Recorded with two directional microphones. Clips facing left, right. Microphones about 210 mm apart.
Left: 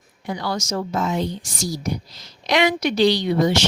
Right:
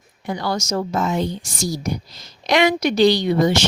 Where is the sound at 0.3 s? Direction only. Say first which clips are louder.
Right 2 dB; 45° right (ahead or behind).